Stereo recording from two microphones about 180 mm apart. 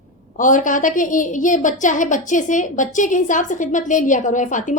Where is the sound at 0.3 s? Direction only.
45° left (ahead or behind).